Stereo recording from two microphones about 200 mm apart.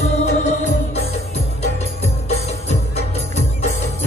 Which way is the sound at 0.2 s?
35° left (ahead or behind).